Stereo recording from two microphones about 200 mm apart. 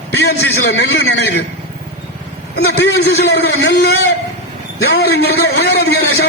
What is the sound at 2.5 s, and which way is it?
A man's voice, 55° left (ahead or behind).